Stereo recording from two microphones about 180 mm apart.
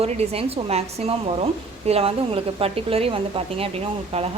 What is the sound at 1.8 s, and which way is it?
A woman's voice, 35° right (ahead or behind).